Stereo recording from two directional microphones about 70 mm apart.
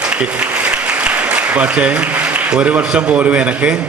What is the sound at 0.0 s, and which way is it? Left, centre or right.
A man's voice, centre.